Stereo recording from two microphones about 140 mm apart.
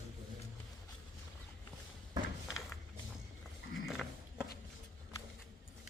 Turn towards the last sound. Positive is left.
turn(degrees=0)  # may be behind; listen again after turning